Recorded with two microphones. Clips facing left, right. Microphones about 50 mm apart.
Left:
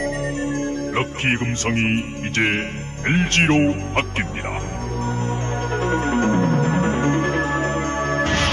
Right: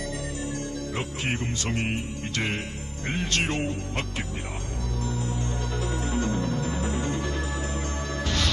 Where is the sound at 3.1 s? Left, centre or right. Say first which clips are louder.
Left 10 dB; left.